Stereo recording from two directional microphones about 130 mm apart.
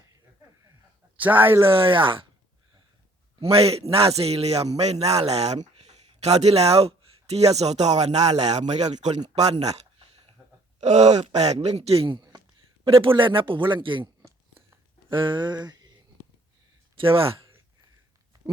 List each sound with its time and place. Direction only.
1.1 s speech: 15° right (ahead or behind)
1.6 s a man's voice: 45° right (ahead or behind)
3.4 s a man's voice: 50° right (ahead or behind)
12.8 s a man's voice: 45° right (ahead or behind)
15.1 s a man's voice: 40° right (ahead or behind)
15.6 s a sound: 30° right (ahead or behind)
16.9 s speech: 45° right (ahead or behind)